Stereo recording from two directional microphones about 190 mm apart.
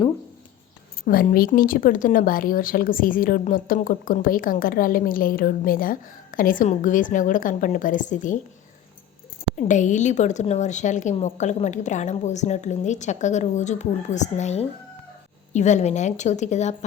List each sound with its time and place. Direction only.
1.0 s speech: 50° left (ahead or behind)
9.6 s a woman's voice: 40° left (ahead or behind)